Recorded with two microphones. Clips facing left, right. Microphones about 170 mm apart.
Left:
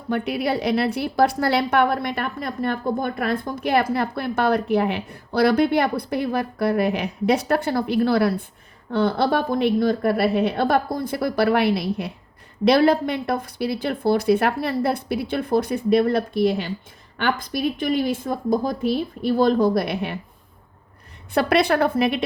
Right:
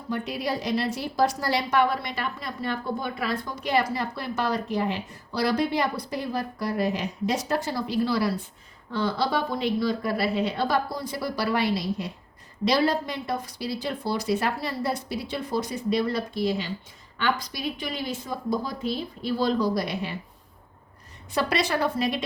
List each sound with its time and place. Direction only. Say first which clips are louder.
0.1 s a woman's voice: left 6 dB; 65° left (ahead or behind)
21.3 s a woman's voice: left 7 dB; 60° left (ahead or behind)